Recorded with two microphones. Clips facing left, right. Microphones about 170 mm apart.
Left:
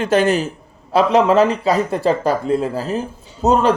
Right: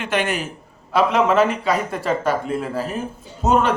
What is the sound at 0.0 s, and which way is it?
Speech, 40° left (ahead or behind).